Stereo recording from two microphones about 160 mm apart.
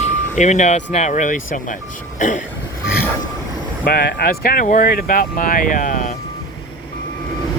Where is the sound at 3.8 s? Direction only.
70° left (ahead or behind); by 6.2 s 50° left (ahead or behind).